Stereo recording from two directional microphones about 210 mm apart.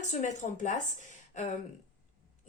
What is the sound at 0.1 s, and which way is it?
Speech, 35° left (ahead or behind).